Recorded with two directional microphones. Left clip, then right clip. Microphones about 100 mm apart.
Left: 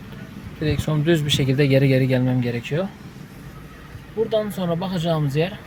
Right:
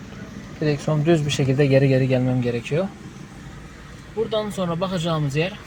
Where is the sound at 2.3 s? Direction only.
15° left (ahead or behind).